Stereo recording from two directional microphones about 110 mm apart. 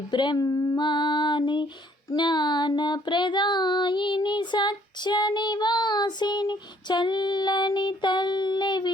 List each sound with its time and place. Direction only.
0.1 s child singing: 45° left (ahead or behind)